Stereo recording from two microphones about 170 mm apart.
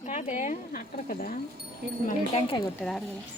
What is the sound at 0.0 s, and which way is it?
Speech, 40° left (ahead or behind).